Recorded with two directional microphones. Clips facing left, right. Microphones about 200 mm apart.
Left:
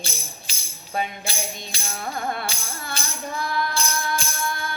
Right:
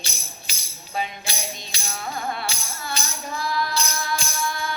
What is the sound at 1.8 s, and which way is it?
Music, 50° left (ahead or behind).